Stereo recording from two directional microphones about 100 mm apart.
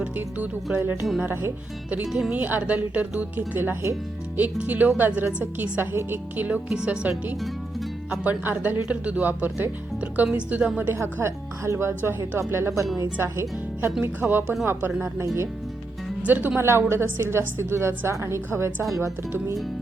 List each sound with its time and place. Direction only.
0.0 s a woman's voice: 15° right (ahead or behind)
2.0 s speech: 5° right (ahead or behind)
2.3 s a woman's voice: 15° right (ahead or behind)
10.8 s speech: 20° right (ahead or behind)
16.2 s speech: 15° right (ahead or behind)